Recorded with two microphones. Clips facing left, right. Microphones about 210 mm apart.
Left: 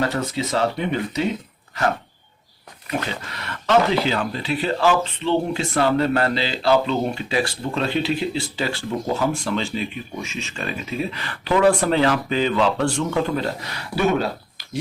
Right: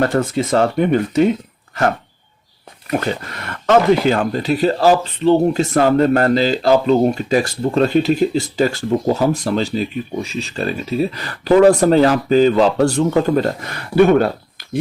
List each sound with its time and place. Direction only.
0.0 s speech: 50° right (ahead or behind)
2.8 s speech: 45° right (ahead or behind)